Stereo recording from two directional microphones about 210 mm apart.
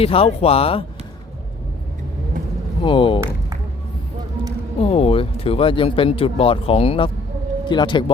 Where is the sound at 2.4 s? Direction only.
40° right (ahead or behind).